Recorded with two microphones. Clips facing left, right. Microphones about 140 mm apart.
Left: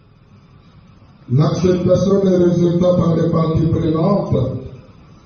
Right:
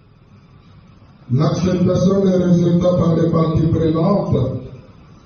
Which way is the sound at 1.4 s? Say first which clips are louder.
Left 2 dB; centre (ahead or behind).